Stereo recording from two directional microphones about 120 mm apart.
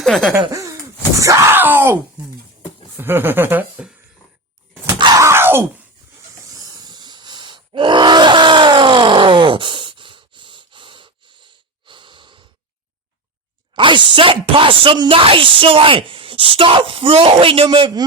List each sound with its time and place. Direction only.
0.0 s speech: 5° left (ahead or behind)
0.5 s laughter: 25° right (ahead or behind)
1.2 s speech: 25° right (ahead or behind)
3.0 s speech: 20° right (ahead or behind)
4.9 s groan: 40° right (ahead or behind)
5.2 s wail: 20° right (ahead or behind)
6.6 s groan: 30° right (ahead or behind)
13.7 s speech: 45° right (ahead or behind)